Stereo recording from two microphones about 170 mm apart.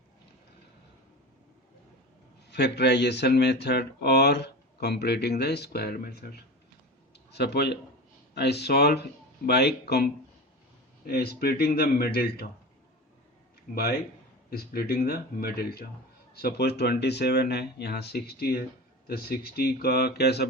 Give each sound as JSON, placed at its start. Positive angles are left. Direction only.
{"t": 2.5, "sound": "speech", "side_deg": 75}
{"t": 7.1, "sound": "a sound", "side_deg": 80}
{"t": 8.4, "sound": "a man's voice", "side_deg": 75}
{"t": 14.5, "sound": "a man's voice", "side_deg": 65}